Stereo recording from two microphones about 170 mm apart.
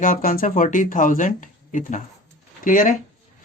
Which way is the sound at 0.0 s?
55° left (ahead or behind).